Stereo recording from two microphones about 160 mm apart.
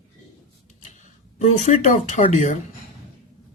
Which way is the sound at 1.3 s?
45° left (ahead or behind).